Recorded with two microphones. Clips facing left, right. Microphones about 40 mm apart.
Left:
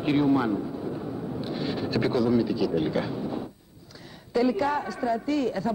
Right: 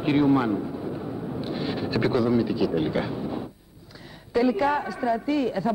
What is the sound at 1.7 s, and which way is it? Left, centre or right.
A man's voice, centre.